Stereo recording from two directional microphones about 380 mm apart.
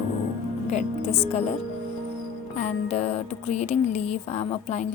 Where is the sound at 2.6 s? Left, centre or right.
Centre.